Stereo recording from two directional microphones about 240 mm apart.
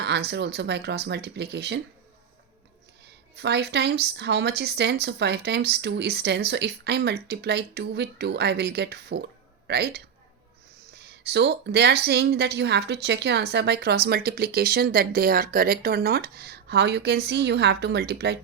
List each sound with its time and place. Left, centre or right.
0.0 s a woman's voice: right
3.3 s a woman's voice: right